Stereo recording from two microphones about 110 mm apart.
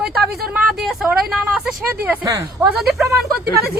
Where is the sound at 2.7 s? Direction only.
Centre (ahead or behind).